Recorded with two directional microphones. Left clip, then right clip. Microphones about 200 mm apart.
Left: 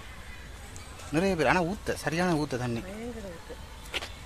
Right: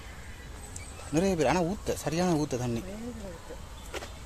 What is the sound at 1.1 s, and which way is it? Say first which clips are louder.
Speech: left 1 dB; 5° left (ahead or behind).